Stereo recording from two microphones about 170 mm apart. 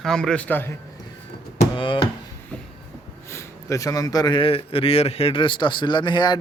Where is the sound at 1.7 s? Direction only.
30° left (ahead or behind).